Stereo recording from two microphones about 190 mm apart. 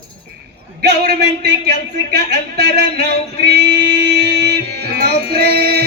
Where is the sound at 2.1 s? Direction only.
60° right (ahead or behind).